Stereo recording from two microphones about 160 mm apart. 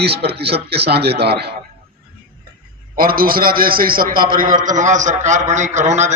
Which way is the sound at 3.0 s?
65° right (ahead or behind).